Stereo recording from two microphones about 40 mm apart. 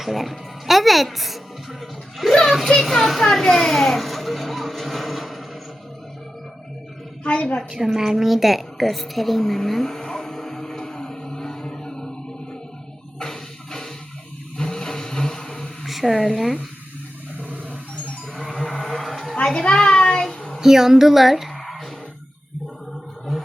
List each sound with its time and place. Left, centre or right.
0.0 s speech: centre
1.8 s music: centre
2.5 s speech: centre
7.3 s a woman's voice: left
7.7 s a sound: centre
13.1 s music: centre
14.6 s vehicle: centre
15.8 s speech: centre
17.4 s a sound: right
18.3 s vehicle: centre
19.7 s a sound: left
20.6 s speech: centre